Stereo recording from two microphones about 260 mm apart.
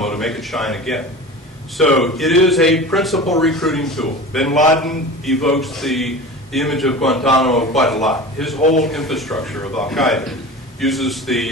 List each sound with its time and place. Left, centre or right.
0.0 s a man's voice: centre
8.5 s a man's voice: left
8.8 s a man's voice: centre